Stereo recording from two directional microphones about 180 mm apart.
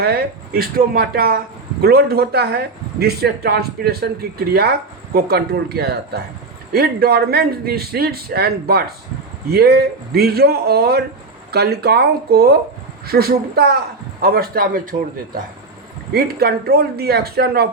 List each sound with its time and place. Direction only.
0.0 s speech: 60° right (ahead or behind)
16.1 s speech: 60° right (ahead or behind)